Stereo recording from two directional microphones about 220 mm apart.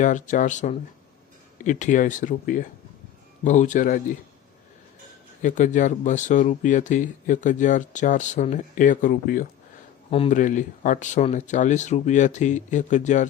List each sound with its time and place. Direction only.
0.0 s speech: 35° left (ahead or behind)
5.4 s speech: 35° left (ahead or behind)